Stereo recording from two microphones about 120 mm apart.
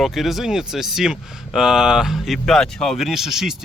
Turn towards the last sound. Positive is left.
turn(degrees=-5)  # may be behind; listen again after turning